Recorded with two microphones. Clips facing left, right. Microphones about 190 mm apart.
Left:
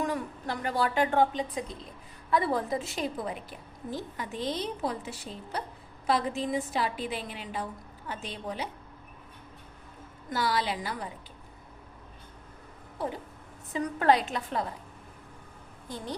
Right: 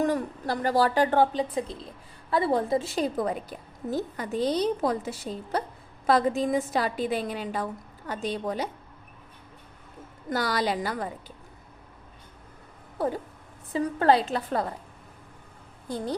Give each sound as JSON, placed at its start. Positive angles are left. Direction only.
{"t": 0.0, "sound": "a woman's voice", "side_deg": -35}
{"t": 10.2, "sound": "a woman's voice", "side_deg": -45}
{"t": 13.7, "sound": "a woman's voice", "side_deg": -30}